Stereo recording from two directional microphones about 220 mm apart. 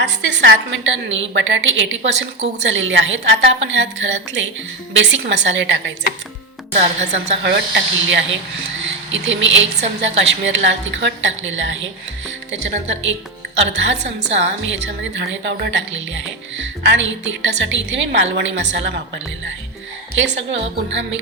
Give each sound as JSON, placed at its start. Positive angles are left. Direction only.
{"t": 0.0, "sound": "a woman's voice", "side_deg": -55}
{"t": 6.7, "sound": "a woman's voice", "side_deg": -30}
{"t": 7.4, "sound": "speech", "side_deg": -50}
{"t": 9.3, "sound": "a woman's voice", "side_deg": -55}
{"t": 13.7, "sound": "a woman's voice", "side_deg": -55}
{"t": 20.1, "sound": "a woman's voice", "side_deg": -55}